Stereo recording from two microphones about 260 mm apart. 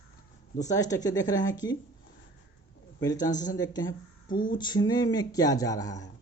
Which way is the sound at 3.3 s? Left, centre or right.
Left.